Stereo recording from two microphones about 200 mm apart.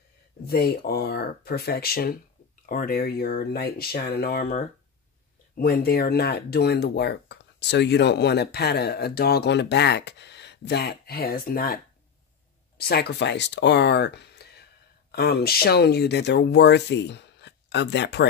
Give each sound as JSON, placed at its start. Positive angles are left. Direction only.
{"t": 0.5, "sound": "speech", "side_deg": 50}